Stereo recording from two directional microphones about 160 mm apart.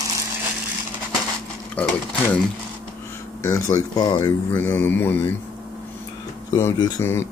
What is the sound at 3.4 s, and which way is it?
Speech, 20° left (ahead or behind).